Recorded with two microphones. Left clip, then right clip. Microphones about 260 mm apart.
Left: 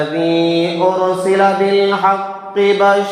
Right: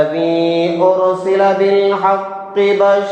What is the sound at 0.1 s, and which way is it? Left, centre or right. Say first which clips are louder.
Mantra: even; left.